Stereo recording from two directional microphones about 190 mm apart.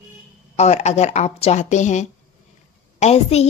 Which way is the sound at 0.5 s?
35° left (ahead or behind).